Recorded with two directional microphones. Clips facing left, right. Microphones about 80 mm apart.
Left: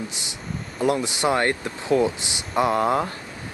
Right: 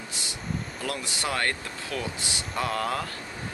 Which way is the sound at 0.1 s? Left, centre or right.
Left.